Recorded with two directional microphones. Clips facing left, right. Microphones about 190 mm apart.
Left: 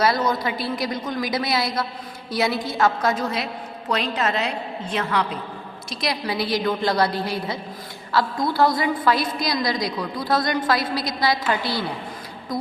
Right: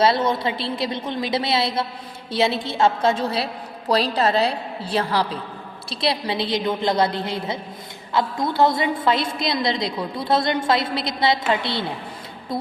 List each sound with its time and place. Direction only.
0.0 s a woman's voice: 25° right (ahead or behind)